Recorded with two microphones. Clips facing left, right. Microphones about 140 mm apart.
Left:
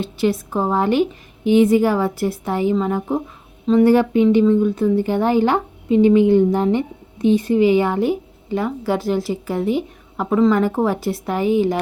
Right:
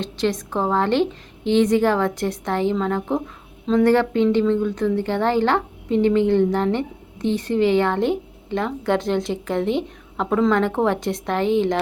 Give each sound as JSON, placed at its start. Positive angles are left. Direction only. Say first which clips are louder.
{"t": 0.0, "sound": "speech", "louder": "left 3 dB", "side_deg": 10}